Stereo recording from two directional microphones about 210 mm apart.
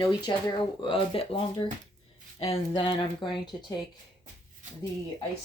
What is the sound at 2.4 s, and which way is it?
Speech, 25° left (ahead or behind).